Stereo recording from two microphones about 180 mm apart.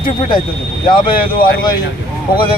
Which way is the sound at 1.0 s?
25° left (ahead or behind).